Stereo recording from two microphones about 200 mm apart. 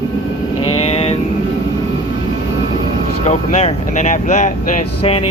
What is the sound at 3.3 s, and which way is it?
Speech, 30° left (ahead or behind).